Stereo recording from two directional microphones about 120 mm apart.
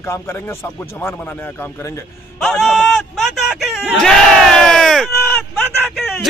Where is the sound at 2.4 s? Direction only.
5° left (ahead or behind).